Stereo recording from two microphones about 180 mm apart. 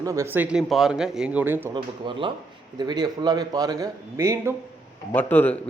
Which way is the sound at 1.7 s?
25° right (ahead or behind).